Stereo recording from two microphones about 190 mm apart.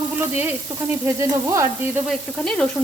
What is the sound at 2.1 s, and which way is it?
Sizzle, 5° left (ahead or behind).